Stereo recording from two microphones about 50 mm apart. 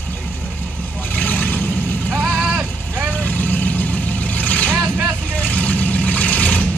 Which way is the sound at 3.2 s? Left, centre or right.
Left.